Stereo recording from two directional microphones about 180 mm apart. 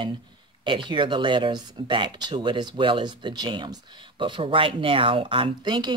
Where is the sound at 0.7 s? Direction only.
25° right (ahead or behind).